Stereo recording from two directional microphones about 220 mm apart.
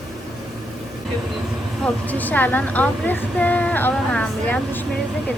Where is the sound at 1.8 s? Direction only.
5° left (ahead or behind).